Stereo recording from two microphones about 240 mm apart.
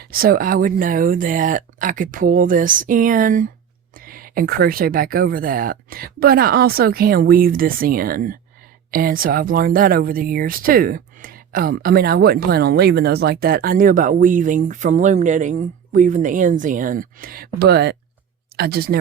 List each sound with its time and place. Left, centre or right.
0.0 s speech: right